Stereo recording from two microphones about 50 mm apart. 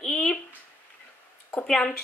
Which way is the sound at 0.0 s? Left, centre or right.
Centre.